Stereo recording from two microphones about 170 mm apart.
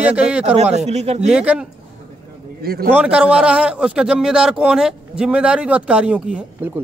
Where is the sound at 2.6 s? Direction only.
65° right (ahead or behind).